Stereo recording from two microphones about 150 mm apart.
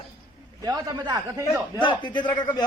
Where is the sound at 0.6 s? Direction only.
25° right (ahead or behind).